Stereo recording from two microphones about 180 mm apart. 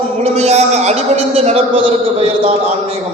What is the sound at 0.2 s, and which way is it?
A man's voice, 35° right (ahead or behind).